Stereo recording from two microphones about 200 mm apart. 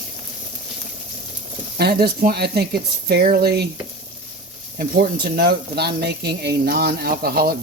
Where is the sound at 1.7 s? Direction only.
50° right (ahead or behind).